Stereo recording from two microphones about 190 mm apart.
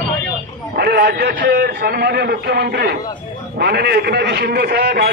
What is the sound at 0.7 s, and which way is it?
Speech, 55° right (ahead or behind).